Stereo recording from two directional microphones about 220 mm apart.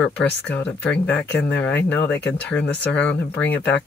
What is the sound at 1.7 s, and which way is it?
Speech, 55° left (ahead or behind).